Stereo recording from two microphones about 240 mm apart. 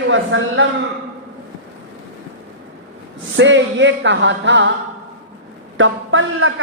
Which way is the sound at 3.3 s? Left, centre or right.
Right.